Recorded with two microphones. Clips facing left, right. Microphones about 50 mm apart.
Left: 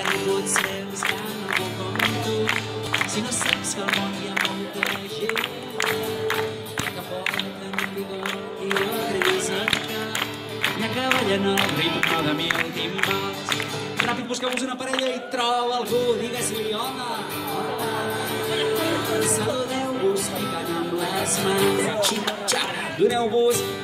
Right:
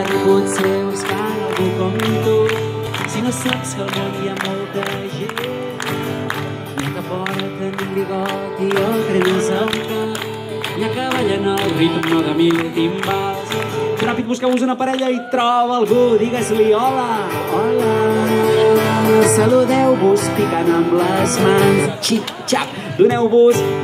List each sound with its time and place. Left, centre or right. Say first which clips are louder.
1.6 s music: right 8 dB; right
8.7 s music: right 7 dB; right
10.8 s music: right 6 dB; centre
14.0 s speech: right 8 dB; right
22.5 s speech: right 6 dB; right